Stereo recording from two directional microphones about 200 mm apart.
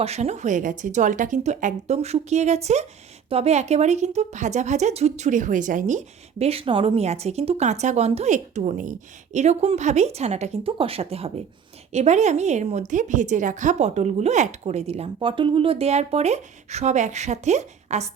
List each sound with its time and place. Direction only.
0.0 s speech: 30° right (ahead or behind)